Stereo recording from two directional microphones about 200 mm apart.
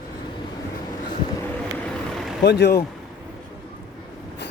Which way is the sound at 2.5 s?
55° left (ahead or behind).